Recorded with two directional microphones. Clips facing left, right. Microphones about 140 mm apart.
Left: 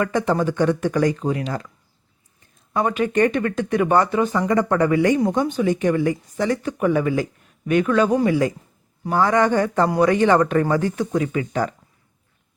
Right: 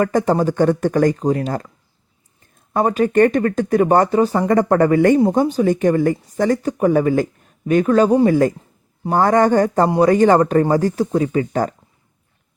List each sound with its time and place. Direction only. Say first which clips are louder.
0.0 s speech: right 4 dB; 40° right (ahead or behind)
2.7 s speech: right 5 dB; 40° right (ahead or behind)
9.1 s speech: right 4 dB; 45° right (ahead or behind)